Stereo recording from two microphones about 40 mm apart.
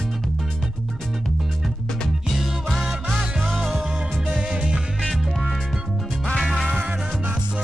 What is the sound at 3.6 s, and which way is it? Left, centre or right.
Music, centre.